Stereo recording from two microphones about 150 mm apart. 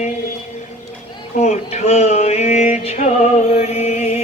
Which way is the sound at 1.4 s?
50° left (ahead or behind).